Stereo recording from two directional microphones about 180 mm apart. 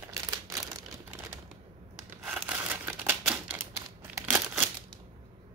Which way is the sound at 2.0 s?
10° right (ahead or behind).